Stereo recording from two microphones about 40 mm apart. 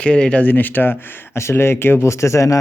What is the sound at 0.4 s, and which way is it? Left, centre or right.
Speech, left.